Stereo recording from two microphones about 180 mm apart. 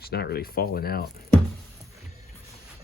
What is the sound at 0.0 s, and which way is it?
Speech, 60° left (ahead or behind).